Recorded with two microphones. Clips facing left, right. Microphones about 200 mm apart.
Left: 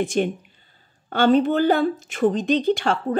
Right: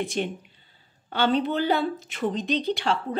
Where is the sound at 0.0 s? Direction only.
50° left (ahead or behind).